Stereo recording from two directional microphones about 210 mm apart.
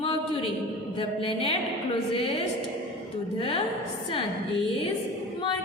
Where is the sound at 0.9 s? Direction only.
25° left (ahead or behind).